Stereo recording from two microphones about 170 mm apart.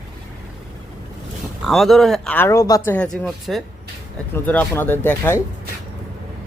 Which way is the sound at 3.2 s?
Centre (ahead or behind).